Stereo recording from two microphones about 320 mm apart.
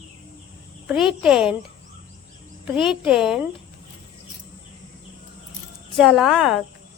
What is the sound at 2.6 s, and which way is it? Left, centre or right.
Speech, centre.